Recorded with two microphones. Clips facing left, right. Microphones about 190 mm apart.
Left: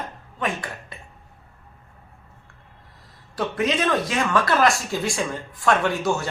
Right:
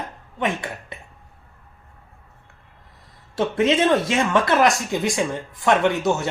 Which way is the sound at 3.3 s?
25° right (ahead or behind).